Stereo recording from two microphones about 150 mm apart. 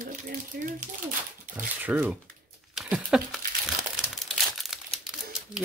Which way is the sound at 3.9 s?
Centre (ahead or behind).